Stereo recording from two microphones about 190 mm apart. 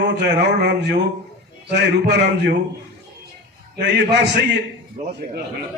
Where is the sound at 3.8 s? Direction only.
65° right (ahead or behind).